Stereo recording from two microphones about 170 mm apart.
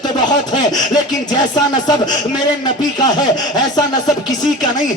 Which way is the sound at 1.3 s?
25° left (ahead or behind).